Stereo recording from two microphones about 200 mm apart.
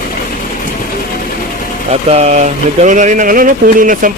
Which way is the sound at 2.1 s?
35° right (ahead or behind).